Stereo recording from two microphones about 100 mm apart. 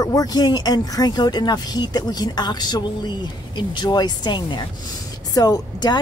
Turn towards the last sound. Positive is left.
turn(degrees=45)  # may be behind; listen again after turning